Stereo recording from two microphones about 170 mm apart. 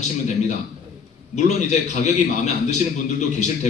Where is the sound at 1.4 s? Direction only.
45° left (ahead or behind).